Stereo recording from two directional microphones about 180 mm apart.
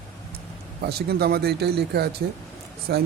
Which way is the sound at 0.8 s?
60° right (ahead or behind).